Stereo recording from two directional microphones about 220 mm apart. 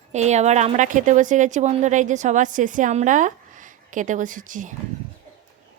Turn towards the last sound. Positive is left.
turn(degrees=-35)  # may be behind; listen again after turning